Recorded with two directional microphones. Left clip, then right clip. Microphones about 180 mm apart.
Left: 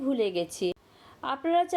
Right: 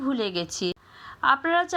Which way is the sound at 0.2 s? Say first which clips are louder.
Even; 5° right (ahead or behind).